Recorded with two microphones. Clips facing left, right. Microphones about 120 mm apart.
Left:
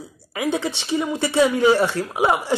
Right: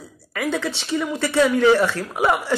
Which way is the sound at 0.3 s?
20° left (ahead or behind).